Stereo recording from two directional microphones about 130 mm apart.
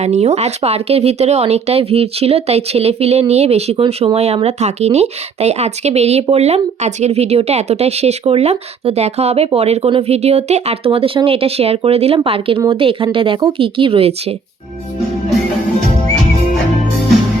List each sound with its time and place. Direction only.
0.0 s speech: 60° right (ahead or behind)